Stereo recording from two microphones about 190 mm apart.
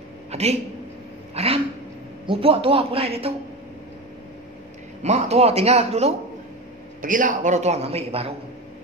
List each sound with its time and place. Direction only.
0.3 s a man's voice: 35° right (ahead or behind)
5.0 s a man's voice: 35° right (ahead or behind)
7.0 s a man's voice: 45° right (ahead or behind)